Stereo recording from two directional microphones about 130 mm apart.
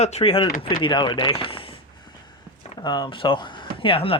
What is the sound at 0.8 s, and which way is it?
Speech, 35° left (ahead or behind).